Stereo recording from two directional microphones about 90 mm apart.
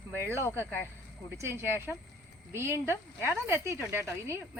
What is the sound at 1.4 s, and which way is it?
Speech, 30° right (ahead or behind).